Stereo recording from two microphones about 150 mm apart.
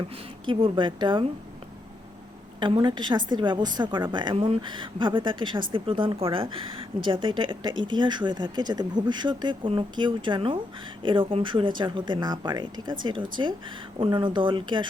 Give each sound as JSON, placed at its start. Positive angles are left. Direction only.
{"t": 0.4, "sound": "speech", "side_deg": -35}
{"t": 2.6, "sound": "speech", "side_deg": -30}